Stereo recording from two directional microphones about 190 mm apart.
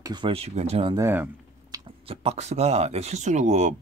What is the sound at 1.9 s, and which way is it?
Speech, 30° right (ahead or behind).